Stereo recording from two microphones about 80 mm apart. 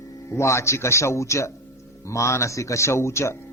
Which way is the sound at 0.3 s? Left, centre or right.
Left.